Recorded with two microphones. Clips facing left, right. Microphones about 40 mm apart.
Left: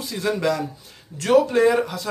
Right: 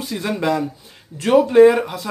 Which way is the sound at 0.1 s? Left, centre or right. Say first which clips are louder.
Right 2 dB; right.